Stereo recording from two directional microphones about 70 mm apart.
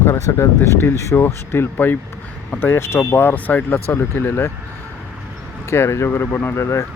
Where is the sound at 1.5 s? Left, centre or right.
Left.